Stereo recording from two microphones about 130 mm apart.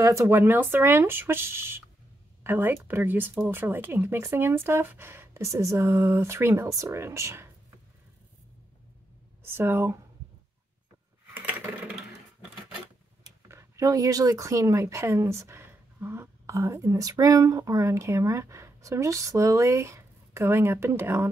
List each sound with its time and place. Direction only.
0.0 s speech: 25° right (ahead or behind)
9.4 s speech: 15° right (ahead or behind)
13.2 s speech: 25° right (ahead or behind)